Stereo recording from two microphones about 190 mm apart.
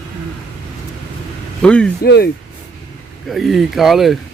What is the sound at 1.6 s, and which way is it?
Speech, 5° left (ahead or behind).